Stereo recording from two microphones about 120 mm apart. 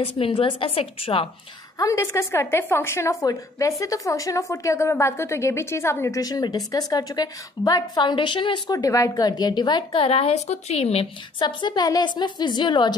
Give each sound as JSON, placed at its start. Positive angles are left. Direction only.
{"t": 0.0, "sound": "a woman's voice", "side_deg": 55}
{"t": 1.8, "sound": "a woman's voice", "side_deg": 25}
{"t": 8.7, "sound": "a woman's voice", "side_deg": 30}
{"t": 10.0, "sound": "a woman's voice", "side_deg": 55}
{"t": 11.4, "sound": "a woman's voice", "side_deg": 35}